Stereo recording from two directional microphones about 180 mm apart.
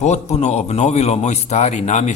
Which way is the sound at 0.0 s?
40° left (ahead or behind).